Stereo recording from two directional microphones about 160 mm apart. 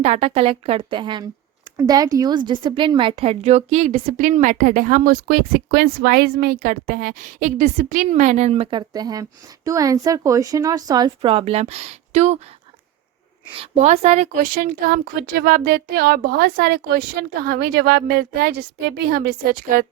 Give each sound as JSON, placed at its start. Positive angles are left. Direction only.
{"t": 0.0, "sound": "a woman's voice", "side_deg": -40}
{"t": 4.2, "sound": "a woman's voice", "side_deg": -50}
{"t": 8.9, "sound": "a woman's voice", "side_deg": -25}
{"t": 13.6, "sound": "a woman's voice", "side_deg": -40}